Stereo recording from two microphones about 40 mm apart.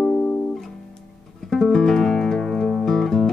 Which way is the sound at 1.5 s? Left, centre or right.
Centre.